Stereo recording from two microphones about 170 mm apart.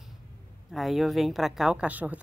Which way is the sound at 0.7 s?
Centre (ahead or behind).